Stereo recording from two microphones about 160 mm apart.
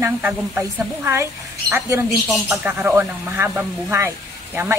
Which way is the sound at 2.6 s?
10° right (ahead or behind).